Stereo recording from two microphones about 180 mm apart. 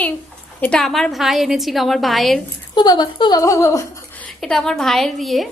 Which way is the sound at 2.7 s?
25° left (ahead or behind).